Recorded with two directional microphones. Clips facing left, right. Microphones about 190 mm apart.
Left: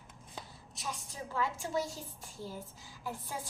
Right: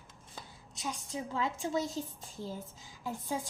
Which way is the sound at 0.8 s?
15° right (ahead or behind).